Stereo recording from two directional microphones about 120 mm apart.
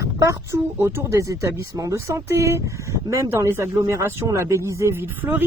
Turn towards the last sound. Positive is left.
turn(degrees=-15)  # may be behind; listen again after turning